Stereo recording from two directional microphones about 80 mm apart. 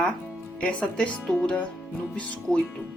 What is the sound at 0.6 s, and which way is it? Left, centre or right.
Speech, centre.